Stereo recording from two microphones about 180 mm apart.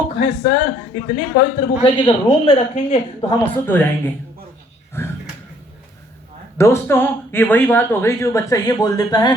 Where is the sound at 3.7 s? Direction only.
10° left (ahead or behind).